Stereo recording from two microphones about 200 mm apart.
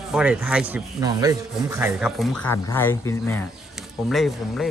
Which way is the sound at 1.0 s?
15° right (ahead or behind).